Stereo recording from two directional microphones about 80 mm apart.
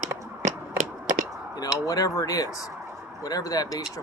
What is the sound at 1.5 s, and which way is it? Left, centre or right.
Speech, left.